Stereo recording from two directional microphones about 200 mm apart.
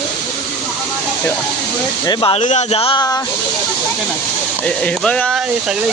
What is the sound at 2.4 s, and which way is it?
Speech, 35° left (ahead or behind).